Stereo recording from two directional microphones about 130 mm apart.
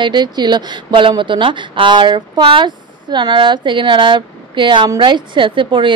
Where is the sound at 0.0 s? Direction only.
35° right (ahead or behind).